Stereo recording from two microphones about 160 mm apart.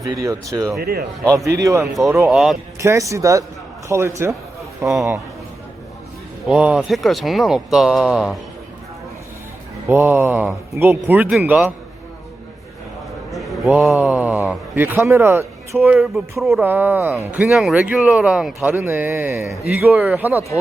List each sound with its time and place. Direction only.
0.0 s speech: 20° right (ahead or behind)
0.8 s speech: 75° right (ahead or behind)
1.5 s speech: 20° right (ahead or behind)
2.2 s speech: centre (ahead or behind)
2.7 s speech: 15° right (ahead or behind)
6.5 s speech: 5° right (ahead or behind)
9.9 s speech: 10° right (ahead or behind)
13.3 s a man's voice: centre (ahead or behind); by 15.8 s 15° right (ahead or behind)
15.8 s speech: centre (ahead or behind)